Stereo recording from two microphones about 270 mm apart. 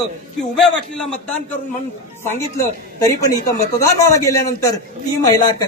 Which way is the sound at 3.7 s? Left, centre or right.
Centre.